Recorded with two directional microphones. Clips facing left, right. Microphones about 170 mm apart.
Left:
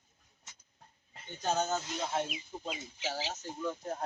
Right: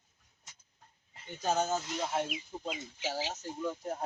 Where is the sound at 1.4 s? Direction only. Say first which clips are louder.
Right 1 dB; 5° right (ahead or behind).